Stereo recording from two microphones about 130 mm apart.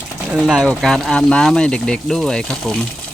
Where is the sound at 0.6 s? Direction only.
5° left (ahead or behind).